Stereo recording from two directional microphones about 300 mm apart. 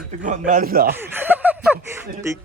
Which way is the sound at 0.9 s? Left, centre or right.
Centre.